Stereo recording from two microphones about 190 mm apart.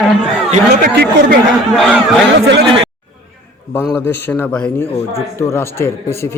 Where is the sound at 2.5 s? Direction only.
70° right (ahead or behind).